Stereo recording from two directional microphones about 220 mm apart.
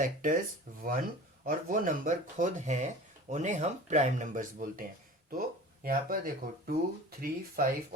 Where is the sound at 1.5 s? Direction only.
40° right (ahead or behind).